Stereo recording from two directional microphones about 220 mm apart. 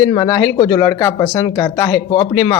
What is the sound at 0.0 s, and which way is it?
A man's voice, 15° left (ahead or behind).